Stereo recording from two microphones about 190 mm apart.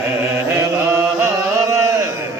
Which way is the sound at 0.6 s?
15° right (ahead or behind).